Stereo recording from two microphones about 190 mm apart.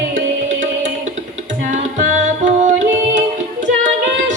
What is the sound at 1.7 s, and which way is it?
Music, 40° right (ahead or behind).